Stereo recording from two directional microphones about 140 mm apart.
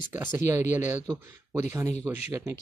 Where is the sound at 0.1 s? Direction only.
15° right (ahead or behind).